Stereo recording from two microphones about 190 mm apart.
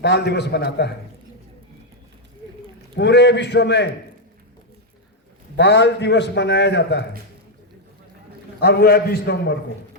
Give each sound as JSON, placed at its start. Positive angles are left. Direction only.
{"t": 0.0, "sound": "a man's voice", "side_deg": 60}
{"t": 2.9, "sound": "a man's voice", "side_deg": 65}
{"t": 5.5, "sound": "a man's voice", "side_deg": 65}
{"t": 8.6, "sound": "a man's voice", "side_deg": 55}